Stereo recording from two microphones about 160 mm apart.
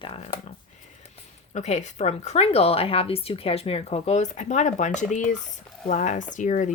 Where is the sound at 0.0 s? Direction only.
40° left (ahead or behind).